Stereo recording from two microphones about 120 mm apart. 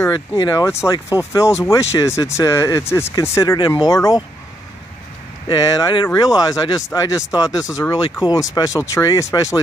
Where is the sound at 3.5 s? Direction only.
40° left (ahead or behind).